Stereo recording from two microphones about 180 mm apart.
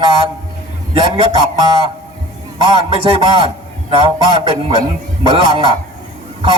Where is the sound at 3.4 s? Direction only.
30° right (ahead or behind).